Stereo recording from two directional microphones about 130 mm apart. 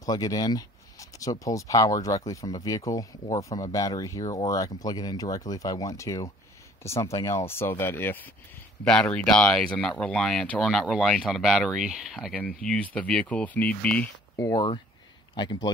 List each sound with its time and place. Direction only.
0.0 s speech: 30° left (ahead or behind); by 14.1 s 10° left (ahead or behind)
14.3 s speech: 30° left (ahead or behind)